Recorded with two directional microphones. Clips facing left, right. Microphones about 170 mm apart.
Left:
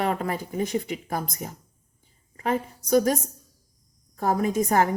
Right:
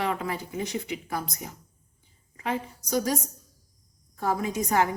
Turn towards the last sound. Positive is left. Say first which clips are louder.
# left 3 dB
turn(degrees=45)  # may be behind; listen again after turning